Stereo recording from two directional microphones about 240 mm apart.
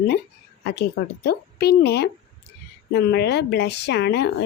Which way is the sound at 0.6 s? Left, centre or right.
Left.